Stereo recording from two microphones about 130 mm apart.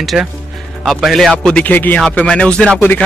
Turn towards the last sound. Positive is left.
turn(degrees=10)  # may be behind; listen again after turning